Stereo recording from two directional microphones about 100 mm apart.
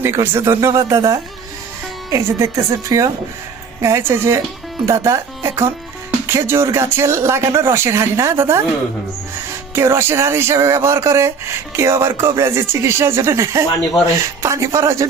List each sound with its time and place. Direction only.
0.0 s speech: 25° right (ahead or behind)
9.7 s speech: 25° right (ahead or behind)